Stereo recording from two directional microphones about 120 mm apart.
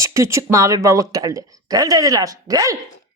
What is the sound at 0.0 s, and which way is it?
Speech, 25° right (ahead or behind).